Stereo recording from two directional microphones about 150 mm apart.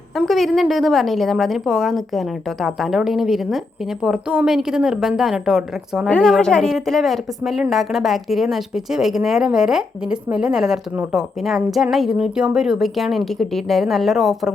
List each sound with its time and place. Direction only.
0.2 s a woman's voice: centre (ahead or behind)